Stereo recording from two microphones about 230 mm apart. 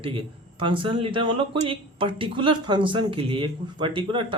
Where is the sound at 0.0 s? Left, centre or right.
Right.